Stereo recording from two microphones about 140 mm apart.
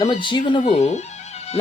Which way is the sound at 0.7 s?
55° left (ahead or behind).